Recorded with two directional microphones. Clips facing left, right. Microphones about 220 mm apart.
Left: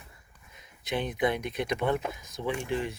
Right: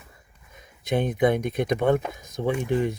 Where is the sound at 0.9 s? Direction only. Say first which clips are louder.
Right 7 dB; 50° right (ahead or behind).